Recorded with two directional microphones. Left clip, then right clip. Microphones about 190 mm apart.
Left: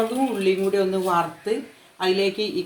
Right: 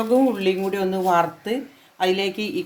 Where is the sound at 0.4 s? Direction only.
55° right (ahead or behind).